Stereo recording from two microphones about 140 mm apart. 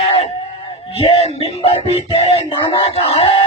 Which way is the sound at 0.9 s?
45° left (ahead or behind).